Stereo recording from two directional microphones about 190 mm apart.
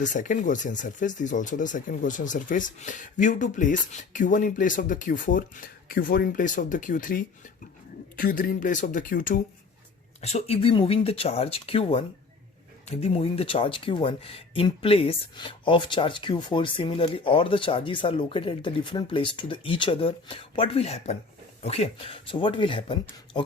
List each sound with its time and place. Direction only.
0.0 s speech: 40° left (ahead or behind)
10.2 s speech: 35° left (ahead or behind)